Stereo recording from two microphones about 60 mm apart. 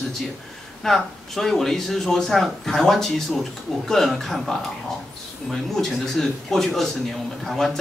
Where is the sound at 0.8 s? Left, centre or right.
Centre.